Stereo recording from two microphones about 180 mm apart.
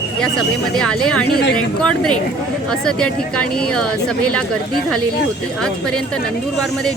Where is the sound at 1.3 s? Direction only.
60° left (ahead or behind).